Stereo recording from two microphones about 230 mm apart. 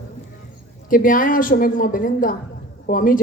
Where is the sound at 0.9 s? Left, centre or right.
Left.